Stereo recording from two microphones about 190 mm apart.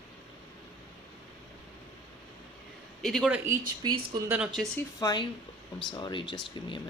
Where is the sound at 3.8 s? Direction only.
25° right (ahead or behind).